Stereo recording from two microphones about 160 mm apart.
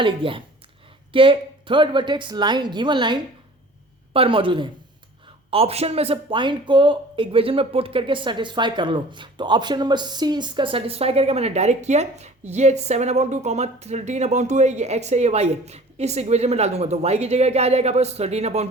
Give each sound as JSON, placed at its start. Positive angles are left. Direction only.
{"t": 0.0, "sound": "a woman's voice", "side_deg": -30}